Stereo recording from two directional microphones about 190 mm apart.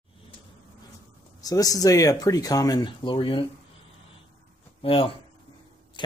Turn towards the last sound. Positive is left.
turn(degrees=30)  # may be behind; listen again after turning